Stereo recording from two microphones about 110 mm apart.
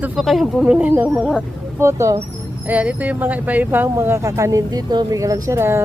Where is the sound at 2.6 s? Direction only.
10° right (ahead or behind).